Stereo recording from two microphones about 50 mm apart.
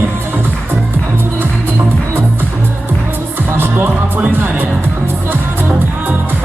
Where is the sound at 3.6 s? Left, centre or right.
Right.